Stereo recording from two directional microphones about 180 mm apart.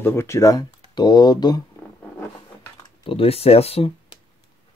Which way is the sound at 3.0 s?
30° left (ahead or behind).